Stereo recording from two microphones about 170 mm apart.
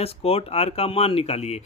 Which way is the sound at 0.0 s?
35° left (ahead or behind).